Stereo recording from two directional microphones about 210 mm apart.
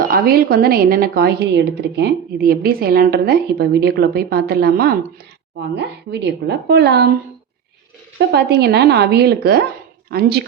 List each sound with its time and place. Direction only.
0.1 s a woman's voice: 45° right (ahead or behind)
8.3 s a woman's voice: 50° right (ahead or behind)